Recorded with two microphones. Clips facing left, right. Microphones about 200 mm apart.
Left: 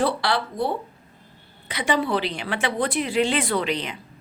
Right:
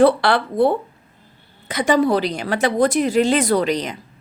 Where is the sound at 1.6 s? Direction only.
45° right (ahead or behind).